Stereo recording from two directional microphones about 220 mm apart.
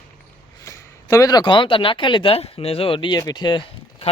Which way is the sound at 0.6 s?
15° left (ahead or behind).